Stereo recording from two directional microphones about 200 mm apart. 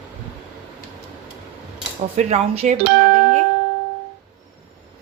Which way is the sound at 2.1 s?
35° right (ahead or behind).